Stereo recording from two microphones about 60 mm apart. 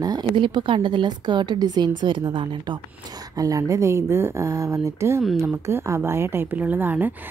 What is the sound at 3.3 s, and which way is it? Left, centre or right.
A woman's voice, right.